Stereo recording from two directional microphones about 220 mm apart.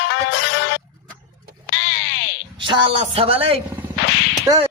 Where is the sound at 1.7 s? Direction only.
50° left (ahead or behind).